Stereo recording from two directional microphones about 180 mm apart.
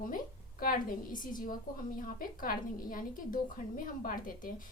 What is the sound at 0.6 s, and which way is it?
A woman's voice, 50° left (ahead or behind).